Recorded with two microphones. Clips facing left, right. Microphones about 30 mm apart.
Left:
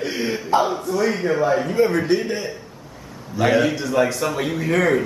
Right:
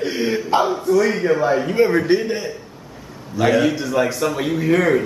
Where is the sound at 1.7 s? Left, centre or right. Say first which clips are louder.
Right 2 dB; right.